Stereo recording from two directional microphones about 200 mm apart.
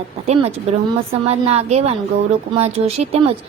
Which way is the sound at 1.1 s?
30° right (ahead or behind).